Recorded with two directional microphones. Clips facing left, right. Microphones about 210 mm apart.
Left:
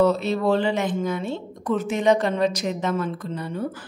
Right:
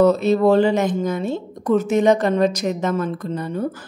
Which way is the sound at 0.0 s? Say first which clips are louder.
Right 5 dB; 45° right (ahead or behind).